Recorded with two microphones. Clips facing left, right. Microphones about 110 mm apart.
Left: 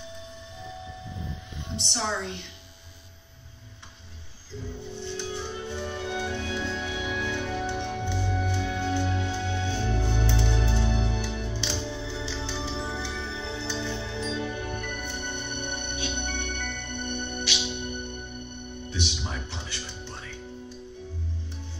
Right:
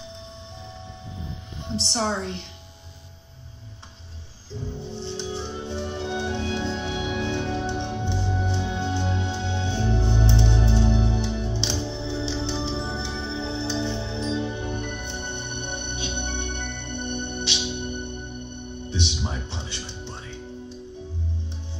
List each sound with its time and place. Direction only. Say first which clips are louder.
1.8 s a woman's voice: right 4 dB; 35° right (ahead or behind)
4.9 s music: right 2 dB; 30° right (ahead or behind)
18.9 s music: right 4 dB; 25° right (ahead or behind)